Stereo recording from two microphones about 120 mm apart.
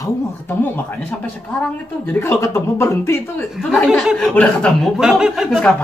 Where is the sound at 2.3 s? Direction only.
25° left (ahead or behind).